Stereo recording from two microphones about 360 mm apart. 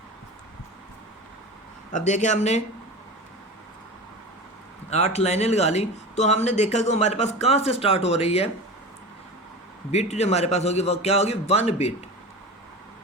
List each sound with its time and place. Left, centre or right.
1.9 s a man's voice: centre
4.9 s speech: centre
9.9 s speech: centre